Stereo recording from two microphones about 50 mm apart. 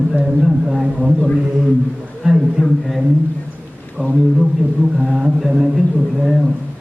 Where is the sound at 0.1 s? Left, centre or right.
Centre.